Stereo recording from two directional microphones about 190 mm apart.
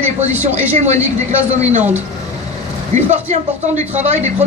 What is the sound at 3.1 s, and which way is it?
A man's voice, 40° right (ahead or behind).